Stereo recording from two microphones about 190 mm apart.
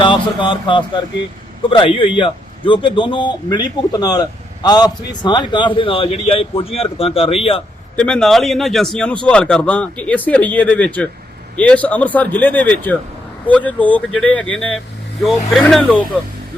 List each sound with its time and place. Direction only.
0.0 s a man's voice: 25° left (ahead or behind)
7.9 s a man's voice: 5° left (ahead or behind)